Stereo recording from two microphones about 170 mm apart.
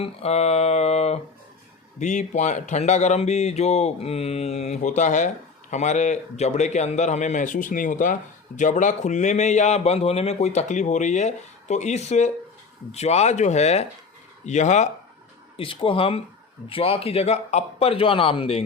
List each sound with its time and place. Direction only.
0.0 s speech: 40° left (ahead or behind)
15.5 s speech: 30° left (ahead or behind)